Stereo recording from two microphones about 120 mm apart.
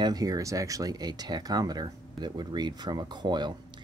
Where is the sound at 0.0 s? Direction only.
30° right (ahead or behind).